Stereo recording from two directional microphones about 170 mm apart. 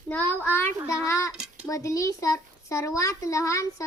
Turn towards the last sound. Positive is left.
turn(degrees=20)  # may be behind; listen again after turning